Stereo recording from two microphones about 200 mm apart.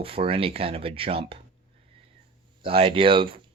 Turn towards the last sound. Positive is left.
turn(degrees=-25)  # may be behind; listen again after turning